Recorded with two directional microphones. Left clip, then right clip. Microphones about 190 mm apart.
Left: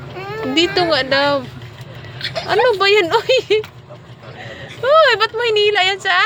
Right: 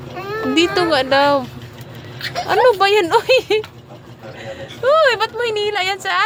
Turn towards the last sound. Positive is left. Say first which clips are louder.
# left 4 dB
turn(degrees=0)  # may be behind; listen again after turning